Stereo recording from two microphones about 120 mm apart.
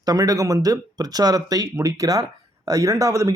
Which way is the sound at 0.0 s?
30° right (ahead or behind).